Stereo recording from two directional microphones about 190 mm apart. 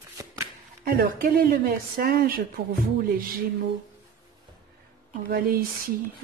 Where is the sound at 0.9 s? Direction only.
50° right (ahead or behind).